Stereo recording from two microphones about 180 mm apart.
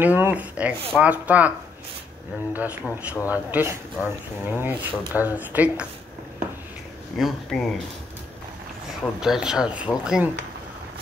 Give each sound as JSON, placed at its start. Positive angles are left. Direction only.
{"t": 0.0, "sound": "speech", "side_deg": -10}
{"t": 2.5, "sound": "speech", "side_deg": -10}
{"t": 7.2, "sound": "speech", "side_deg": 0}
{"t": 9.2, "sound": "speech", "side_deg": -5}